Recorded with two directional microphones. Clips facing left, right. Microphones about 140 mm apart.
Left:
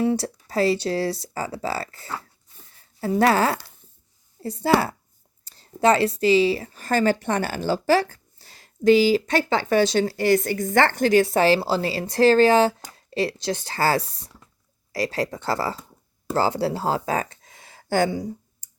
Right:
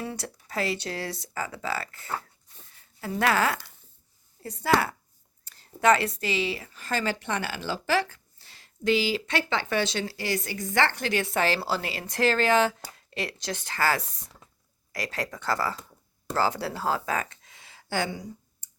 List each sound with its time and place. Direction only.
0.1 s speech: 35° left (ahead or behind)